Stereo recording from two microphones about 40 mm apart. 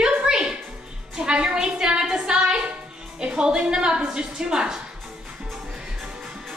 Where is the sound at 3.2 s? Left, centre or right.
Centre.